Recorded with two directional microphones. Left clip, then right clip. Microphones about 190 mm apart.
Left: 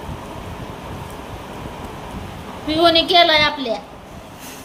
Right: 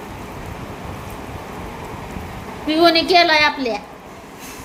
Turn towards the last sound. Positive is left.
turn(degrees=-10)  # may be behind; listen again after turning